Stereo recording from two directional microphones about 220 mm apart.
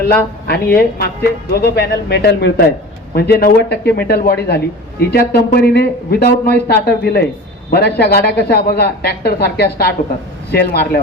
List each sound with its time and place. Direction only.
0.4 s speech: 45° left (ahead or behind)